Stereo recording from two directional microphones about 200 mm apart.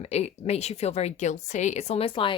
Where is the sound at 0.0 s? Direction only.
30° left (ahead or behind).